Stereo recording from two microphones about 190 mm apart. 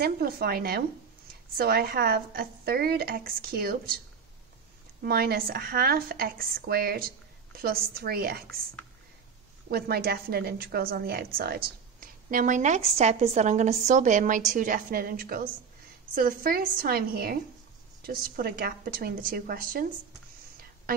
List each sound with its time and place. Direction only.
0.0 s a woman's voice: 55° right (ahead or behind)
5.0 s a woman's voice: 55° right (ahead or behind)
9.7 s a woman's voice: 55° right (ahead or behind)